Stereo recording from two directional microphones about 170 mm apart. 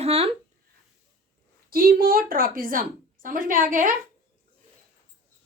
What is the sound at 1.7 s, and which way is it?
A woman's voice, 60° right (ahead or behind).